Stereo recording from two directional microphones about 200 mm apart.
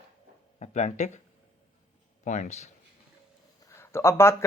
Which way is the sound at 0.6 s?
35° left (ahead or behind).